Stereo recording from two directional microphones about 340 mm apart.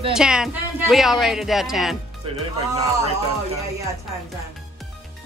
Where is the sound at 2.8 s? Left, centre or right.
Centre.